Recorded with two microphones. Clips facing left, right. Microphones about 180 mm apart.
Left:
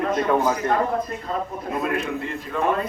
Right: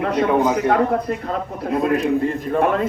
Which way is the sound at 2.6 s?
70° right (ahead or behind).